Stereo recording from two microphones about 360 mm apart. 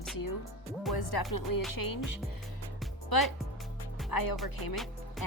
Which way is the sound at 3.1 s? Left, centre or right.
Left.